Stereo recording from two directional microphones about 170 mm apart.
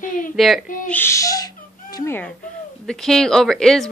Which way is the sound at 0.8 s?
15° left (ahead or behind).